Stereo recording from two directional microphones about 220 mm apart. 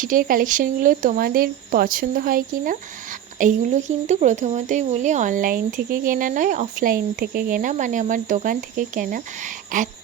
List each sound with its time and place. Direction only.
0.0 s speech: 40° right (ahead or behind)